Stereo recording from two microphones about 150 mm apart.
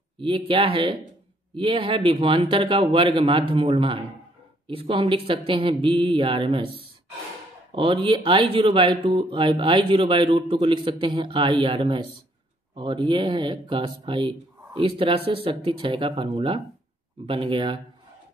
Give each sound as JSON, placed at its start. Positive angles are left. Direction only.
{"t": 0.2, "sound": "speech", "side_deg": -35}
{"t": 7.7, "sound": "speech", "side_deg": -35}